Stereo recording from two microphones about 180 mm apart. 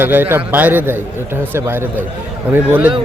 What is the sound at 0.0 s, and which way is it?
Speech, 10° right (ahead or behind).